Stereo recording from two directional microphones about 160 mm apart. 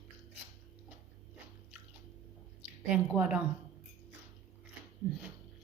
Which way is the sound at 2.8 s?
5° right (ahead or behind).